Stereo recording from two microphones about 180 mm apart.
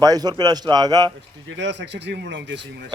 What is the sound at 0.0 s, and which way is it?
A man's voice, 20° right (ahead or behind).